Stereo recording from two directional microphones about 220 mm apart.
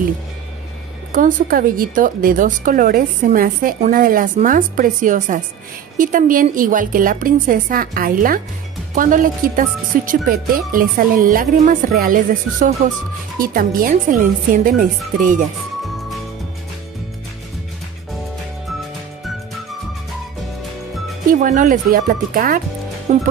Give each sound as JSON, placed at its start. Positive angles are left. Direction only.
{"t": 1.1, "sound": "a woman's voice", "side_deg": -40}
{"t": 21.3, "sound": "a woman's voice", "side_deg": -35}